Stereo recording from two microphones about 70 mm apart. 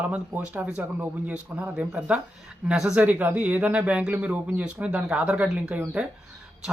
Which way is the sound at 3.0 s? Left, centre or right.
Right.